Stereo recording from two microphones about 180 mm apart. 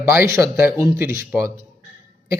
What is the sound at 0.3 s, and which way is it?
Speech, 15° right (ahead or behind).